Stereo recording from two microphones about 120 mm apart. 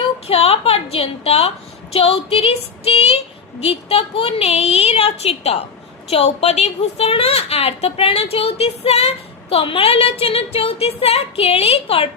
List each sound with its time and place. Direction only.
0.3 s a woman's voice: 55° left (ahead or behind)